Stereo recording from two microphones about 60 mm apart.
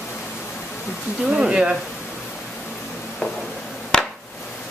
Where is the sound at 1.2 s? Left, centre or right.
Centre.